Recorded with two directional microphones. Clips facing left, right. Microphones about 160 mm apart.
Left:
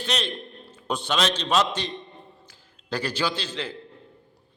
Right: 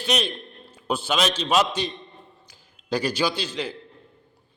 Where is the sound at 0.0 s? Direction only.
10° right (ahead or behind).